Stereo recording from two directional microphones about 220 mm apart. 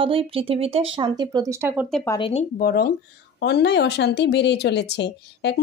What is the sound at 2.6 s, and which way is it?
Speech, 45° left (ahead or behind).